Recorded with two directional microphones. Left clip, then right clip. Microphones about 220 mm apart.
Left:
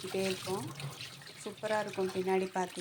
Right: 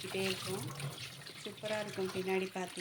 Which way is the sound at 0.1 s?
5° left (ahead or behind).